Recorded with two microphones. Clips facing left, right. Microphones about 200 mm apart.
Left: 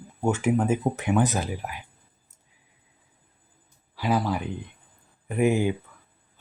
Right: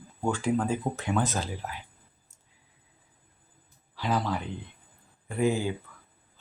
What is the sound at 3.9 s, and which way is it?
Speech, 10° left (ahead or behind).